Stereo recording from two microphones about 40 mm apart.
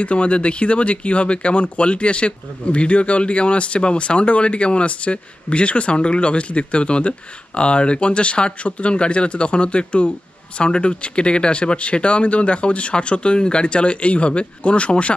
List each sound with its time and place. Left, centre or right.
0.0 s speech: left